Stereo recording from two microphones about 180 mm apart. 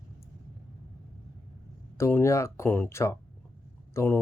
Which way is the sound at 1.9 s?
15° left (ahead or behind).